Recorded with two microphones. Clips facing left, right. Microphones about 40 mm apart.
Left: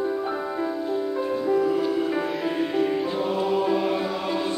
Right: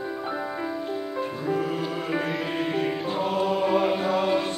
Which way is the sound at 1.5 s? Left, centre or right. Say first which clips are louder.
Left 5 dB; right.